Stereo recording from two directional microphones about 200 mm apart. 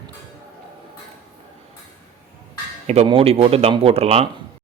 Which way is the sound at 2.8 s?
30° right (ahead or behind).